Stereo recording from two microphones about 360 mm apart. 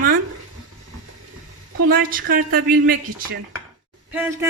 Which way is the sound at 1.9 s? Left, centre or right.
Right.